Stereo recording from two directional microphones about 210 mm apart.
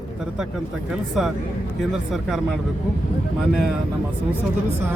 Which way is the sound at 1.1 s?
Centre (ahead or behind).